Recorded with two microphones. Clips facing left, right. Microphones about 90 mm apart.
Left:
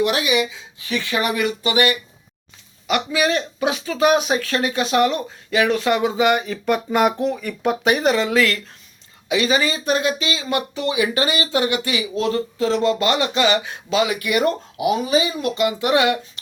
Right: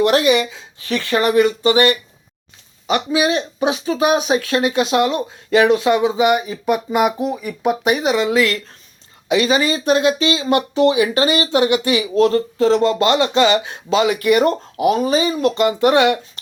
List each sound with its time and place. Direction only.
0.0 s speech: 40° right (ahead or behind); by 8.2 s 5° right (ahead or behind)
8.2 s speech: 20° right (ahead or behind)
9.3 s speech: 35° right (ahead or behind)
12.1 s speech: 40° right (ahead or behind)